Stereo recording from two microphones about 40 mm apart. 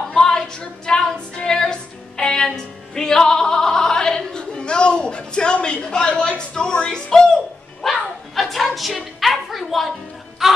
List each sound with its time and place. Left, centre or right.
0.1 s female singing: centre
8.4 s music: centre
9.2 s a sound: centre
10.4 s music: centre